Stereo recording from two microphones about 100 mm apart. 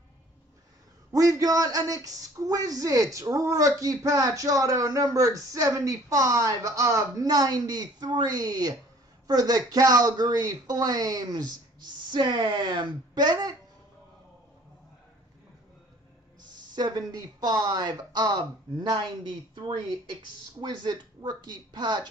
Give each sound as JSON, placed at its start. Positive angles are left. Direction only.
{"t": 1.1, "sound": "speech", "side_deg": -35}
{"t": 16.7, "sound": "a woman's voice", "side_deg": -45}